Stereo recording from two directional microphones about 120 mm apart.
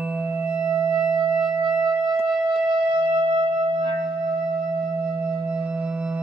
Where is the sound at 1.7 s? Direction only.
45° right (ahead or behind).